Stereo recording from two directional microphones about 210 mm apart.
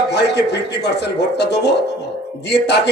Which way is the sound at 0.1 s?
55° left (ahead or behind).